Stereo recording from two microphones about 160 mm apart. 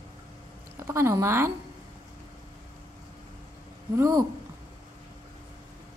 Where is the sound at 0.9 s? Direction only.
15° right (ahead or behind).